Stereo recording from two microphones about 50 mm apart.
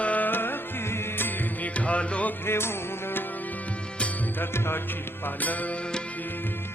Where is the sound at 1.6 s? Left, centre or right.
Left.